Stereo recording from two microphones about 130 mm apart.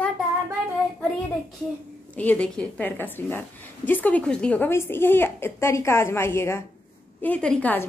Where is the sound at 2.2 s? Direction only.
10° left (ahead or behind).